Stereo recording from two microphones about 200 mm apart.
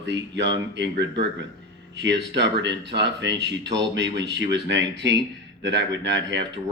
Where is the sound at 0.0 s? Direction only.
60° right (ahead or behind).